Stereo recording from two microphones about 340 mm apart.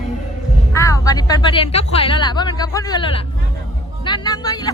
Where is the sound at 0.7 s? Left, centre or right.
Centre.